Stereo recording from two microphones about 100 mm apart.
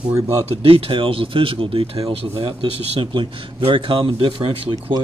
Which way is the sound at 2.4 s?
60° right (ahead or behind).